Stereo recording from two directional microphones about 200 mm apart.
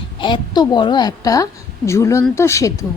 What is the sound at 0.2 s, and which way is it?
A woman's voice, 20° left (ahead or behind).